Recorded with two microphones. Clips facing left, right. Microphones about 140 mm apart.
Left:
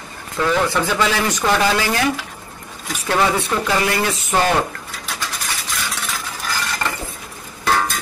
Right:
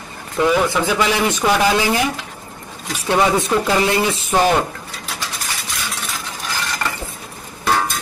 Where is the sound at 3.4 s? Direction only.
20° right (ahead or behind).